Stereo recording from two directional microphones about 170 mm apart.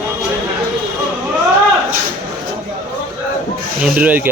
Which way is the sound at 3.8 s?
10° right (ahead or behind).